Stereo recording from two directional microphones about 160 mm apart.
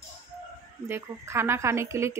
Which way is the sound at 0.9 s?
15° right (ahead or behind).